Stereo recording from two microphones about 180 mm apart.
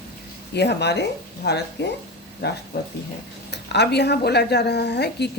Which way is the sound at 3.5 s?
70° left (ahead or behind).